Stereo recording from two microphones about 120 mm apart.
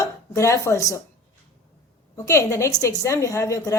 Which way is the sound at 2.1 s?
25° left (ahead or behind).